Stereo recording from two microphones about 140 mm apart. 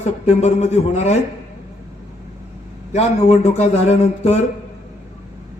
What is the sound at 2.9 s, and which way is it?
Speech, 50° left (ahead or behind).